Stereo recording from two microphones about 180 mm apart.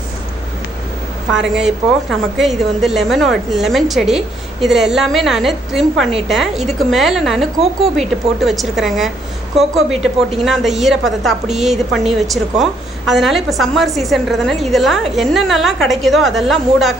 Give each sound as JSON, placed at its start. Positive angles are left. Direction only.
{"t": 1.5, "sound": "a woman's voice", "side_deg": 0}